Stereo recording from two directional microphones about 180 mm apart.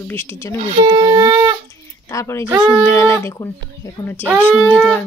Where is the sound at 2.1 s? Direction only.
15° left (ahead or behind).